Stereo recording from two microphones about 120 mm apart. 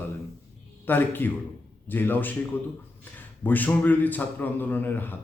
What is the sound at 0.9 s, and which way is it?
A man's voice, 15° left (ahead or behind).